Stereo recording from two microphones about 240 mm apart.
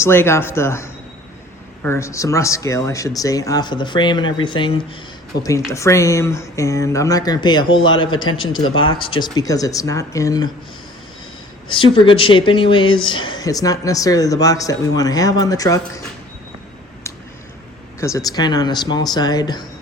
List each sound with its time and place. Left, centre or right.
0.0 s speech: centre
11.7 s speech: left
18.0 s speech: centre